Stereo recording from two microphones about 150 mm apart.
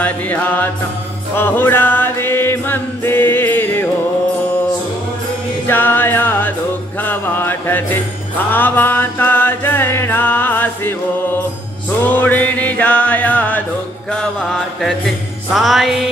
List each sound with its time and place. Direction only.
0.0 s music: 10° left (ahead or behind)
5.7 s music: 15° left (ahead or behind)
12.2 s music: 10° left (ahead or behind)